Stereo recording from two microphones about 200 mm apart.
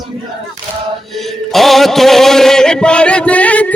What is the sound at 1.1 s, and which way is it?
Chant, centre (ahead or behind).